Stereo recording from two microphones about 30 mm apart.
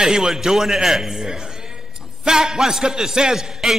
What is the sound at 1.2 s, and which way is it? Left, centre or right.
A man's voice, right.